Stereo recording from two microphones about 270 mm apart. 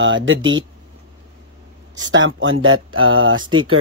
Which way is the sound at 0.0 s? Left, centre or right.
Right.